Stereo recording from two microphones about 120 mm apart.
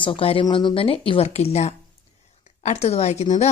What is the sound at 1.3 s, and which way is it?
Speech, 65° left (ahead or behind).